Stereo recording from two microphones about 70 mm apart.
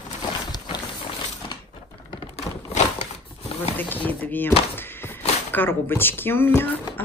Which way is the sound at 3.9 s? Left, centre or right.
Left.